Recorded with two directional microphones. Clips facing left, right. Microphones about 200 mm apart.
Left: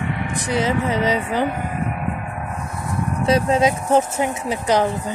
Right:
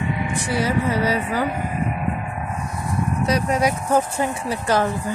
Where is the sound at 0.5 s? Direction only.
20° left (ahead or behind).